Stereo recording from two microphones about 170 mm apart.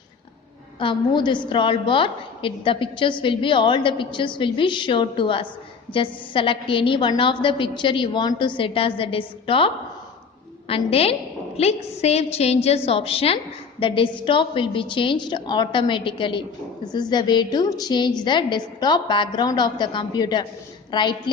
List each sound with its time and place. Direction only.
0.8 s a woman's voice: 30° left (ahead or behind)